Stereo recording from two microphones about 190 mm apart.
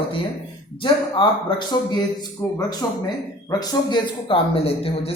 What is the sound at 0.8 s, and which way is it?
Speech, 25° left (ahead or behind).